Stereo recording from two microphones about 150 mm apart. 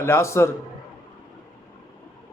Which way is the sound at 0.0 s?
20° left (ahead or behind).